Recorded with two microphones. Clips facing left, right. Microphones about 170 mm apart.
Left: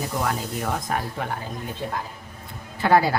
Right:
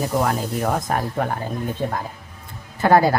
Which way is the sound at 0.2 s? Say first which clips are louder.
Right 3 dB; 45° right (ahead or behind).